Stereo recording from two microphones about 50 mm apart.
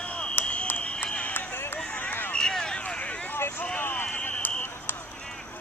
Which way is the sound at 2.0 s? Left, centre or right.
Left.